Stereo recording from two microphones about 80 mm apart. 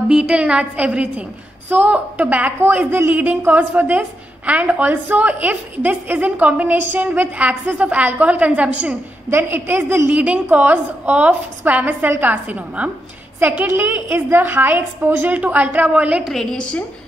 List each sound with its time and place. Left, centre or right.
0.1 s a woman's voice: centre; by 10.1 s right
10.1 s a woman's voice: centre
16.3 s a woman's voice: centre